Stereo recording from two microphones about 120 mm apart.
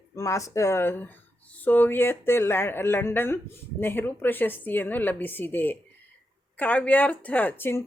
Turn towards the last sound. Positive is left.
turn(degrees=15)  # may be behind; listen again after turning